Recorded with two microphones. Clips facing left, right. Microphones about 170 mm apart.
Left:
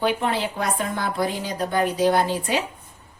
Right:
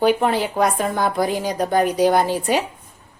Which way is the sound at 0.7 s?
40° right (ahead or behind).